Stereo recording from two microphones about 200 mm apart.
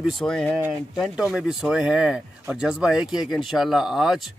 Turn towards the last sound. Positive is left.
turn(degrees=0)  # may be behind; listen again after turning